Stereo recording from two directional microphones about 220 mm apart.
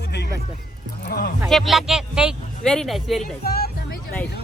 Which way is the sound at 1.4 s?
Centre (ahead or behind).